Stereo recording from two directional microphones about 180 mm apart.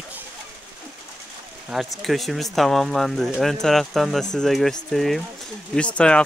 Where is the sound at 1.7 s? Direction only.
Centre (ahead or behind).